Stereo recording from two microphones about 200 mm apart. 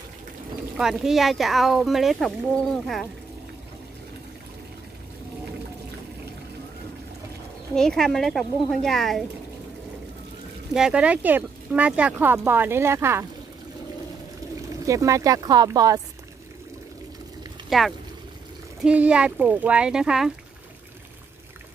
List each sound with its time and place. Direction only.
0.7 s speech: centre (ahead or behind)
7.7 s speech: 5° left (ahead or behind)
10.7 s speech: 5° right (ahead or behind)
14.9 s speech: 15° right (ahead or behind)
17.6 s speech: centre (ahead or behind)